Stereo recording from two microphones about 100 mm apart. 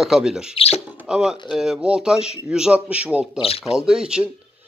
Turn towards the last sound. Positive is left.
turn(degrees=-10)  # may be behind; listen again after turning